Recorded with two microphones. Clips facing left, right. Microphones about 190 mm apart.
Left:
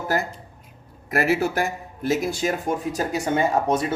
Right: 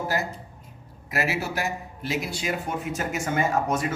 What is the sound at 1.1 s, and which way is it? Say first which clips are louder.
Speech: left 6 dB; 50° left (ahead or behind).